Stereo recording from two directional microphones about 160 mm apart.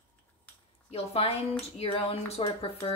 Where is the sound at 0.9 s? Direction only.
40° left (ahead or behind).